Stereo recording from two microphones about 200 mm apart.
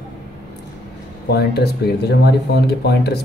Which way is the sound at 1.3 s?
55° left (ahead or behind).